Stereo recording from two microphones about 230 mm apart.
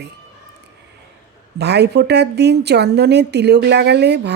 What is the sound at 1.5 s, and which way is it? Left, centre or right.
A woman's voice, right.